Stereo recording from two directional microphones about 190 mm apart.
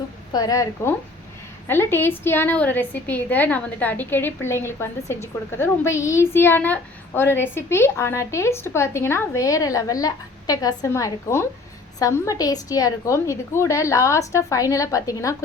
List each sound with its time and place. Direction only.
0.3 s a woman's voice: 20° left (ahead or behind)